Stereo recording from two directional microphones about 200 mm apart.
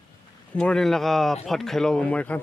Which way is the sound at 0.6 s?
5° left (ahead or behind).